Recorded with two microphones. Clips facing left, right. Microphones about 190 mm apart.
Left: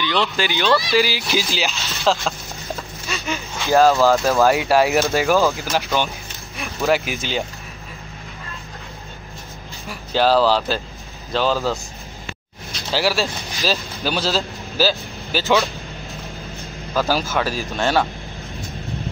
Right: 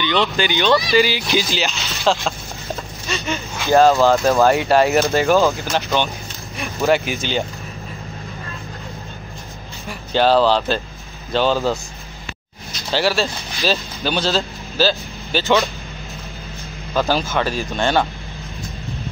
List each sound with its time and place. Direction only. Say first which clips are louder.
0.0 s speech: right 2 dB; centre (ahead or behind)
9.8 s speech: right 1 dB; 5° left (ahead or behind)
12.9 s speech: right 1 dB; 5° left (ahead or behind)
16.9 s speech: right 1 dB; 5° left (ahead or behind)